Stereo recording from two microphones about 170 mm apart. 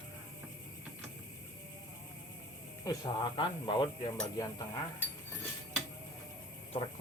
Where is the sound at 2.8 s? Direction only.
25° left (ahead or behind).